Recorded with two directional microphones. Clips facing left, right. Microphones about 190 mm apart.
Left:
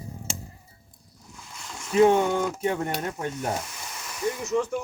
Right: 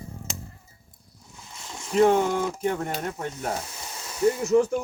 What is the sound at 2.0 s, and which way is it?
Speech, centre (ahead or behind).